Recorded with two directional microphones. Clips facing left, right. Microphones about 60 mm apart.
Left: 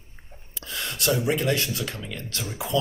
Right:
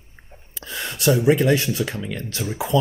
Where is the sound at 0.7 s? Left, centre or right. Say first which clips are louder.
Right 5 dB; right.